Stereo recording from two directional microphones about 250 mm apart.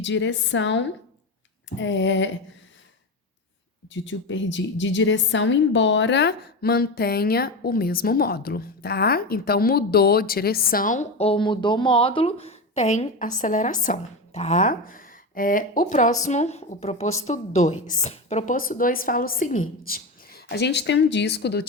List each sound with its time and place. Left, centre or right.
0.0 s a woman's voice: left
3.8 s a woman's voice: left